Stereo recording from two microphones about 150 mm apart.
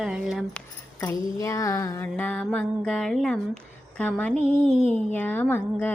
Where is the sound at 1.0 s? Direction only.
20° left (ahead or behind).